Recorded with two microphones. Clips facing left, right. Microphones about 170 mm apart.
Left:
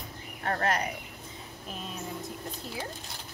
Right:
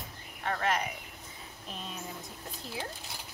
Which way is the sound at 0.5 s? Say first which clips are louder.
Left 2 dB; 40° left (ahead or behind).